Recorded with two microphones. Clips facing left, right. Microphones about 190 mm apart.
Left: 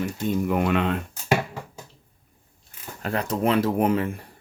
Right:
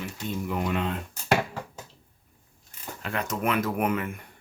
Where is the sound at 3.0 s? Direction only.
35° left (ahead or behind).